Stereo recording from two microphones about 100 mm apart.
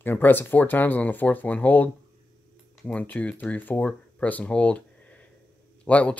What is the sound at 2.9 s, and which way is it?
Speech, 15° left (ahead or behind).